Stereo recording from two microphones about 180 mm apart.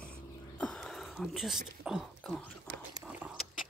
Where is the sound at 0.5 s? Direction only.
5° left (ahead or behind).